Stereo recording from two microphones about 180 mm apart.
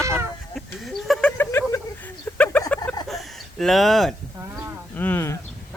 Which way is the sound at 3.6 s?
Centre (ahead or behind).